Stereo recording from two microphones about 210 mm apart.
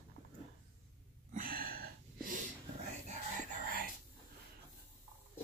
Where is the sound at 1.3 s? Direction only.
45° right (ahead or behind).